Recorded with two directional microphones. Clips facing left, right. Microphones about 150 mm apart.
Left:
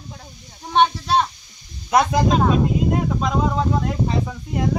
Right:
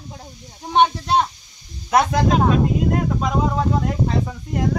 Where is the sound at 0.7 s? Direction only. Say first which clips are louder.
Right 1 dB; 15° right (ahead or behind).